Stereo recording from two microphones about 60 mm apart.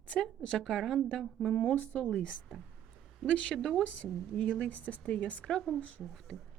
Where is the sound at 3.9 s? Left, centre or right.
Left.